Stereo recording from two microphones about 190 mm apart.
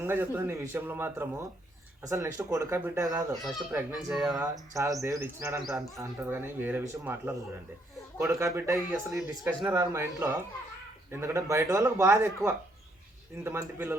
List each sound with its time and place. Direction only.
0.0 s speech: 10° right (ahead or behind)
3.4 s speech: 5° right (ahead or behind)
4.7 s speech: 15° right (ahead or behind)
13.4 s speech: 10° right (ahead or behind)